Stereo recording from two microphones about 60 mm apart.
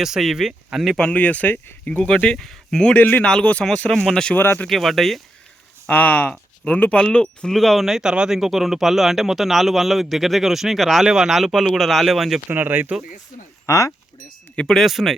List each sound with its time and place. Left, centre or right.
0.0 s speech: centre
0.9 s speech: centre
2.4 s speech: centre
2.9 s speech: left
3.2 s speech: centre
4.4 s speech: left
4.7 s speech: centre
5.9 s speech: left
7.5 s speech: centre
7.9 s speech: centre
12.5 s speech: right
13.7 s speech: left
14.7 s speech: centre